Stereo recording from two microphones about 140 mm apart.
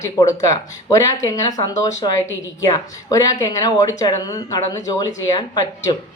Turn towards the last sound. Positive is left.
turn(degrees=30)  # may be behind; listen again after turning